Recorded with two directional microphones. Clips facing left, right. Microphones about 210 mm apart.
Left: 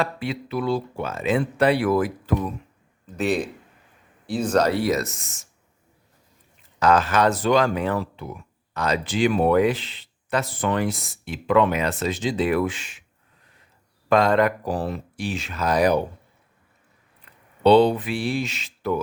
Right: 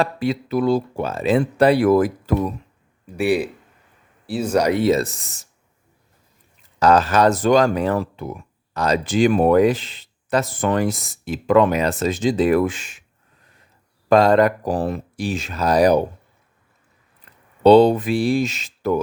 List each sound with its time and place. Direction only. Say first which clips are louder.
0.0 s speech: right 5 dB; 40° right (ahead or behind)
3.1 s a man's voice: right 4 dB; 10° right (ahead or behind); by 5.5 s 35° right (ahead or behind)
6.7 s speech: right 4 dB; 35° right (ahead or behind)
14.1 s speech: right 4 dB; 35° right (ahead or behind)
17.6 s speech: right 4 dB; 45° right (ahead or behind)